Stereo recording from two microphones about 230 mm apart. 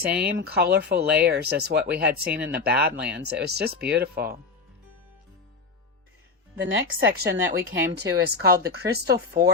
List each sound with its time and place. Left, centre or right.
0.1 s speech: centre
0.3 s speech: right
6.6 s speech: right
7.1 s speech: right